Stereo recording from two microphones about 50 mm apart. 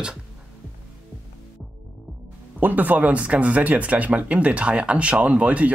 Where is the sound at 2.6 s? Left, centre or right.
Right.